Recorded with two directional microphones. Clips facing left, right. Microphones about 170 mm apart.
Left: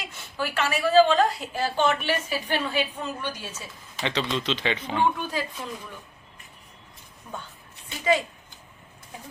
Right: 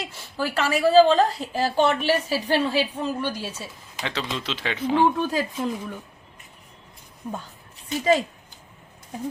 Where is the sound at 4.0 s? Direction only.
5° right (ahead or behind).